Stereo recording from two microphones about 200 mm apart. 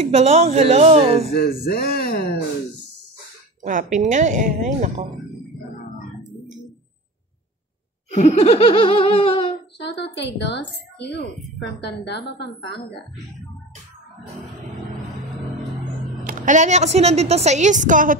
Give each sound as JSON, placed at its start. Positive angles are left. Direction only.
{"t": 0.1, "sound": "a woman's voice", "side_deg": -35}
{"t": 1.3, "sound": "speech", "side_deg": 50}
{"t": 3.6, "sound": "a woman's voice", "side_deg": -40}
{"t": 8.2, "sound": "laughter", "side_deg": 30}
{"t": 9.8, "sound": "a woman's voice", "side_deg": 55}
{"t": 16.3, "sound": "a woman's voice", "side_deg": -40}